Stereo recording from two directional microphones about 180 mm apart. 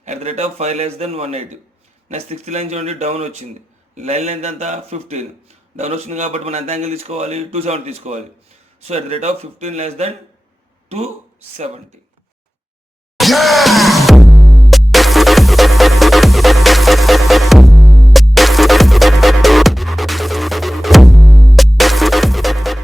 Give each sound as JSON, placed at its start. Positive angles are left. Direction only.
{"t": 0.0, "sound": "speech", "side_deg": -40}
{"t": 13.1, "sound": "music", "side_deg": 0}